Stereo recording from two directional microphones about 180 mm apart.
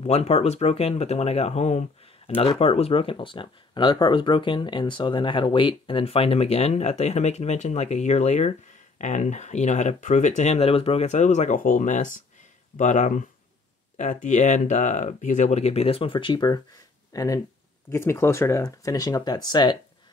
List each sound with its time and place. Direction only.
0.0 s speech: 35° left (ahead or behind)